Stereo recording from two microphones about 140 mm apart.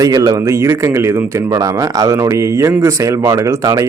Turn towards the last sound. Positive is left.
turn(degrees=-25)  # may be behind; listen again after turning